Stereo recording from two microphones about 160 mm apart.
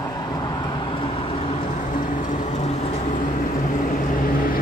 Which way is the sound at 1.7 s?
55° left (ahead or behind).